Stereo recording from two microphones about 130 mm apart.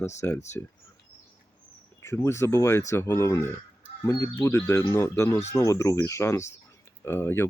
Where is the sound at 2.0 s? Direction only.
20° left (ahead or behind).